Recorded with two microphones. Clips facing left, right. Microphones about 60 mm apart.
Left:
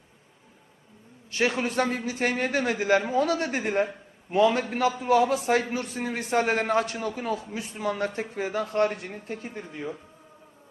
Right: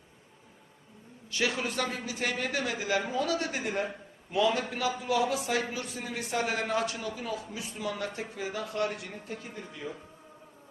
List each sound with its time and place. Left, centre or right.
1.3 s a man's voice: left